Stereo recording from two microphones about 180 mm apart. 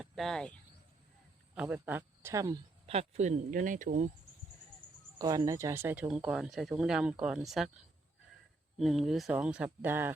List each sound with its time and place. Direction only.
0.0 s speech: centre (ahead or behind)
1.5 s speech: 10° right (ahead or behind)
2.8 s speech: 35° right (ahead or behind)
5.2 s speech: 20° right (ahead or behind); by 7.7 s centre (ahead or behind)
8.8 s speech: centre (ahead or behind)